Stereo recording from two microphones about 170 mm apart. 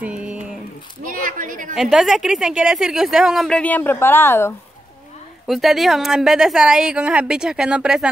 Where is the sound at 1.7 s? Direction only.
Centre (ahead or behind).